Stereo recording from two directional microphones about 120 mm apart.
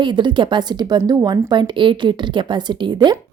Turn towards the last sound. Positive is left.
turn(degrees=-40)  # may be behind; listen again after turning